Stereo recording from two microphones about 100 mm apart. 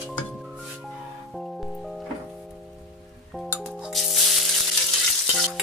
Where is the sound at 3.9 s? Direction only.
Centre (ahead or behind).